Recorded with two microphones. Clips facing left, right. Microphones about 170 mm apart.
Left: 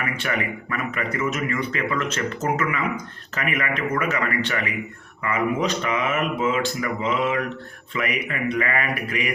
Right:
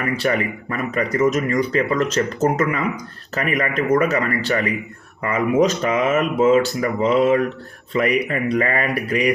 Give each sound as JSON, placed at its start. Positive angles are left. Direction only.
{"t": 0.2, "sound": "speech", "side_deg": -35}